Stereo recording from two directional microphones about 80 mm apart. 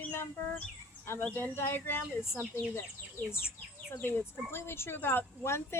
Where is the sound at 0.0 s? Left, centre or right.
Left.